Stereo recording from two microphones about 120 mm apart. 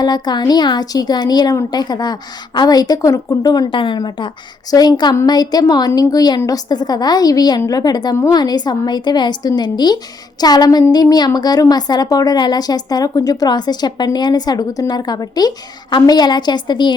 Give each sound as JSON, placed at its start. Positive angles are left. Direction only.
{"t": 0.0, "sound": "speech", "side_deg": 35}